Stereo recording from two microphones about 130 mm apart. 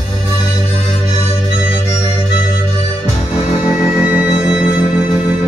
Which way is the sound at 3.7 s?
5° right (ahead or behind).